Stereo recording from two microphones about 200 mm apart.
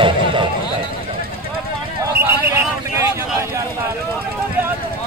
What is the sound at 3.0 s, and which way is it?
Vehicle, 15° right (ahead or behind).